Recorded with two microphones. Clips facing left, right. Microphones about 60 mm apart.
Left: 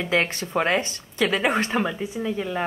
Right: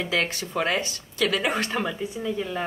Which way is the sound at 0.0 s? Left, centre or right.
Left.